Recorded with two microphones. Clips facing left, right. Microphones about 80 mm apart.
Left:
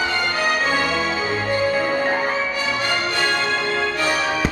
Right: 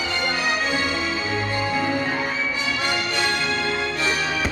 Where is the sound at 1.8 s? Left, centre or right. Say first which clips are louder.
Left 3 dB; left.